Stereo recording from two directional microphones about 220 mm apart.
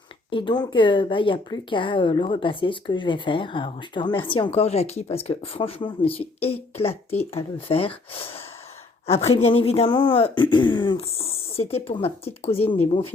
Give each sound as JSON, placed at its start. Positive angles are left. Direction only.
{"t": 0.3, "sound": "speech", "side_deg": 25}
{"t": 12.6, "sound": "speech", "side_deg": 10}
{"t": 12.9, "sound": "speech", "side_deg": 25}